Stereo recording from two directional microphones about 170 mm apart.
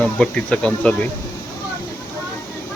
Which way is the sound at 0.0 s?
5° left (ahead or behind).